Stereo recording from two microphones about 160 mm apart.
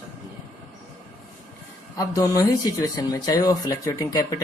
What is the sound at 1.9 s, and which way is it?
Speech, 20° left (ahead or behind).